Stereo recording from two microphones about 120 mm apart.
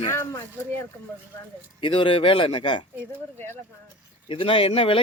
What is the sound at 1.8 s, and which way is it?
Speech, 45° left (ahead or behind).